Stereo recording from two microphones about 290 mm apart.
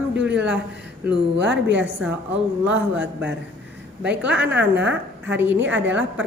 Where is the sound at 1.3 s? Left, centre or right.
Right.